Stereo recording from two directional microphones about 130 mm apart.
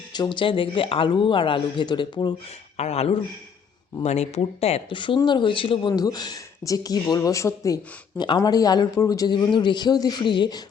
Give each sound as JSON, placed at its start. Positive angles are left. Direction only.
{"t": 0.1, "sound": "speech", "side_deg": 35}
{"t": 2.7, "sound": "speech", "side_deg": 55}
{"t": 4.9, "sound": "speech", "side_deg": 40}
{"t": 5.9, "sound": "speech", "side_deg": 30}